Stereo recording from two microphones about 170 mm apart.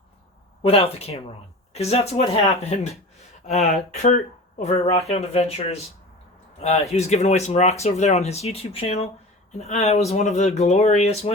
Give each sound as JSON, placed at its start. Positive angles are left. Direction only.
{"t": 0.6, "sound": "speech", "side_deg": 35}